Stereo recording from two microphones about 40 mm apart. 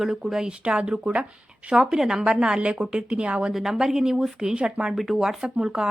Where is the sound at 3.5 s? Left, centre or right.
Centre.